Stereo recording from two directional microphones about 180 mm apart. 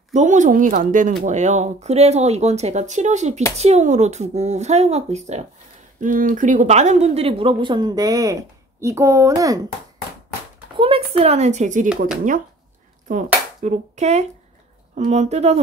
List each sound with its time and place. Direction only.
0.1 s a woman's voice: 40° right (ahead or behind); by 9.6 s 20° right (ahead or behind)
10.8 s a woman's voice: 30° right (ahead or behind)
13.1 s a woman's voice: 40° right (ahead or behind)